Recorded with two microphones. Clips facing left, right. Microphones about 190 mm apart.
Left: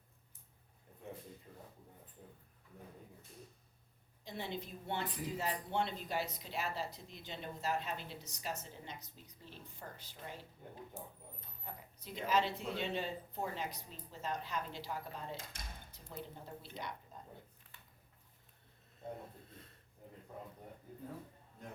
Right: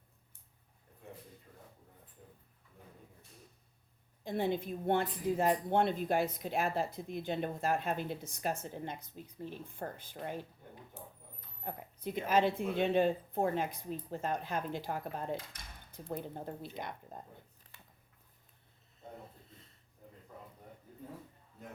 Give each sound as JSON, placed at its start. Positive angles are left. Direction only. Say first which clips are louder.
{"t": 4.2, "sound": "a woman's voice", "louder": "right 10 dB", "side_deg": -50}
{"t": 11.6, "sound": "a woman's voice", "louder": "right 11 dB", "side_deg": -55}
{"t": 19.5, "sound": "a sound", "louder": "left 3 dB", "side_deg": 55}